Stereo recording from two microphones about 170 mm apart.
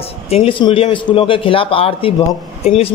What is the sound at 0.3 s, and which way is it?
A man's voice, 35° left (ahead or behind).